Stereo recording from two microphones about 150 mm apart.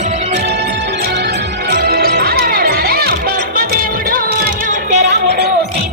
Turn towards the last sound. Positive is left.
turn(degrees=-60)  # may be behind; listen again after turning